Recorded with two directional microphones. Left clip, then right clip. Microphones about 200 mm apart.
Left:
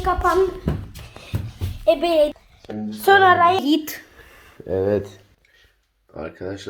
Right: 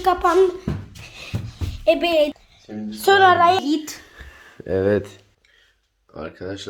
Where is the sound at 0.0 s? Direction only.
25° right (ahead or behind).